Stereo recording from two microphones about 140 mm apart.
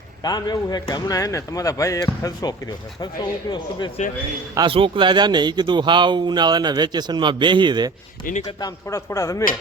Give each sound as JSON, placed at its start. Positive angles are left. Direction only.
{"t": 0.2, "sound": "speech", "side_deg": 30}
{"t": 4.5, "sound": "speech", "side_deg": -40}
{"t": 8.6, "sound": "speech", "side_deg": 20}